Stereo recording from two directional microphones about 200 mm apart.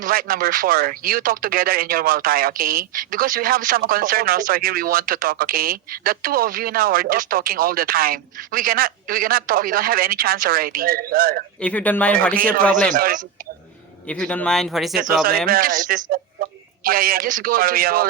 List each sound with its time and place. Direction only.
0.0 s speech: 45° right (ahead or behind)
11.6 s a man's voice: 5° left (ahead or behind)
12.4 s a man's voice: 45° right (ahead or behind)
14.1 s speech: 5° left (ahead or behind)
15.4 s speech: 45° right (ahead or behind)